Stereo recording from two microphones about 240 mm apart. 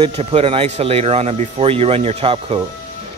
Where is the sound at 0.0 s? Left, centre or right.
Right.